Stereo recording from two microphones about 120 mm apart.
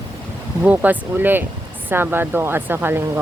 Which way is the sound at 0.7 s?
15° right (ahead or behind).